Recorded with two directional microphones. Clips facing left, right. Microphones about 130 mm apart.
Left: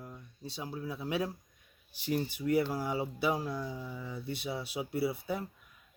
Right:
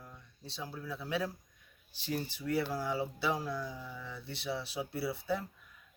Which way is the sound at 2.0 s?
15° left (ahead or behind).